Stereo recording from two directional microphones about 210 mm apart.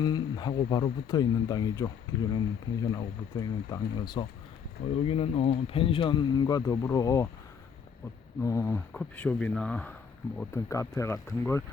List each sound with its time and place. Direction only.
0.0 s speech: 20° left (ahead or behind)
8.4 s speech: 15° left (ahead or behind)